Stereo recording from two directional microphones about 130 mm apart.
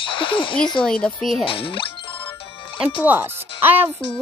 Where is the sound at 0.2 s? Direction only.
40° left (ahead or behind).